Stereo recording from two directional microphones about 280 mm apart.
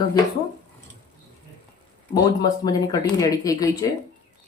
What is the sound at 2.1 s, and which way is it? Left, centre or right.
Speech, centre.